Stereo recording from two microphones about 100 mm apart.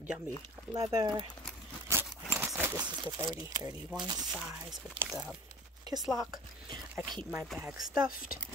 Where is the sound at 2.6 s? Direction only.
15° right (ahead or behind).